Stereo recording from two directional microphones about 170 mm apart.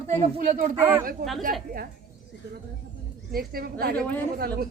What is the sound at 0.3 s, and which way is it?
Speech, 50° right (ahead or behind).